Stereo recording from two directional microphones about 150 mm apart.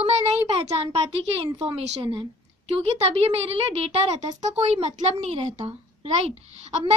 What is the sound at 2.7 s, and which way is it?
A woman's voice, 40° right (ahead or behind).